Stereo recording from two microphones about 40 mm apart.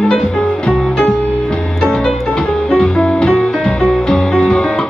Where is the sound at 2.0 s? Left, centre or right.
Centre.